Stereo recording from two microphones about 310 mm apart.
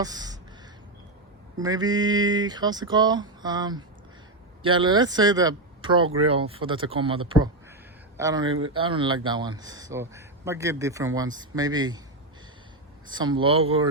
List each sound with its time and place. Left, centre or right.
0.0 s speech: centre
1.5 s speech: centre
8.4 s speech: right
8.7 s speech: centre
13.1 s speech: centre